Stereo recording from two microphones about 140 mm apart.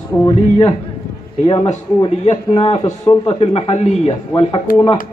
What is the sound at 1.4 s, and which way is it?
A man's voice, 45° left (ahead or behind).